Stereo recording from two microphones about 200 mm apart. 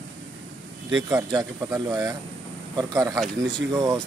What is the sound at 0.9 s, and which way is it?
Speech, 15° right (ahead or behind).